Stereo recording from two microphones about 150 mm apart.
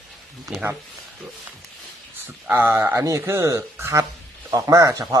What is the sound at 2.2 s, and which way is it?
Speech, 15° right (ahead or behind).